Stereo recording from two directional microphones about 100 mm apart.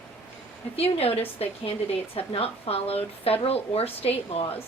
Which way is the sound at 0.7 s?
90° left.